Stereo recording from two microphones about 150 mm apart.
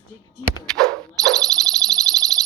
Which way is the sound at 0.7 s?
5° left (ahead or behind).